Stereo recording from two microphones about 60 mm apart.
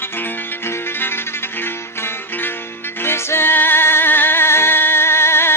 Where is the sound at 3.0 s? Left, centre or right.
Left.